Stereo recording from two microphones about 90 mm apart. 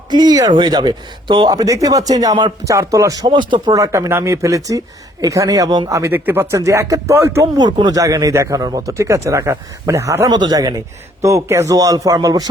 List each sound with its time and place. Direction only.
0.1 s speech: 50° right (ahead or behind)
2.6 s a man's voice: 35° right (ahead or behind)
3.2 s speech: 60° right (ahead or behind)
3.7 s a man's voice: 40° right (ahead or behind)
6.1 s a man's voice: 20° right (ahead or behind)
7.5 s a man's voice: 45° right (ahead or behind)
9.0 s a man's voice: 30° right (ahead or behind)
10.2 s a man's voice: 50° right (ahead or behind)